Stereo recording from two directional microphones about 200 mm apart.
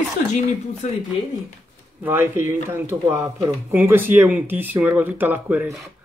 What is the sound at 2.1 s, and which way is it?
Speech, 10° right (ahead or behind).